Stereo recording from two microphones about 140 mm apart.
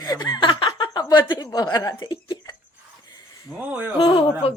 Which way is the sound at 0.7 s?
30° left (ahead or behind).